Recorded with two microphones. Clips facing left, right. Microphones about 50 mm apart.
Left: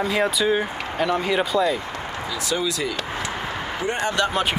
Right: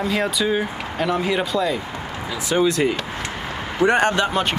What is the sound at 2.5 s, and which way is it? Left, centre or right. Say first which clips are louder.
Speech: right 8 dB; right.